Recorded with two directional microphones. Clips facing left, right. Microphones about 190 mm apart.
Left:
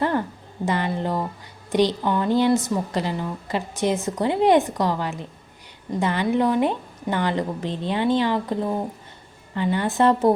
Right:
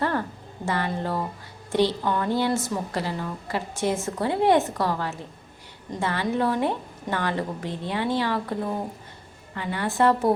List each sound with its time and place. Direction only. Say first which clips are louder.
0.0 s a sound: left 3 dB; 15° left (ahead or behind)
1.7 s a woman's voice: left 2 dB; 15° left (ahead or behind)
9.6 s a woman's voice: left 3 dB; 25° left (ahead or behind)